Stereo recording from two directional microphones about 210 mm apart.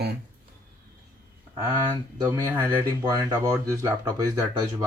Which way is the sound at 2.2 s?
15° right (ahead or behind).